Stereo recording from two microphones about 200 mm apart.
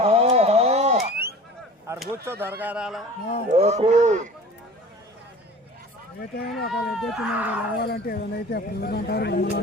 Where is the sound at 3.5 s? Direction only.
30° right (ahead or behind).